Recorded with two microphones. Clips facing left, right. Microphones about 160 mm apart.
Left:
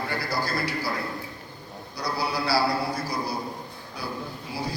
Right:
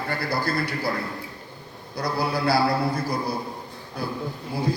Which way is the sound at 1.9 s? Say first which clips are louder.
Right 3 dB; 50° right (ahead or behind).